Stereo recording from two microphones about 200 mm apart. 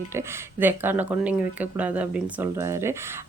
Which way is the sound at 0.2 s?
10° right (ahead or behind).